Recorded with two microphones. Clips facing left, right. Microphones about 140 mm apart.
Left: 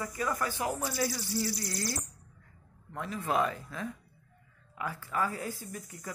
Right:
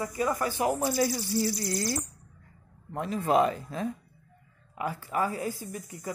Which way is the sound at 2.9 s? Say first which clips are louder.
Right 6 dB; 25° right (ahead or behind).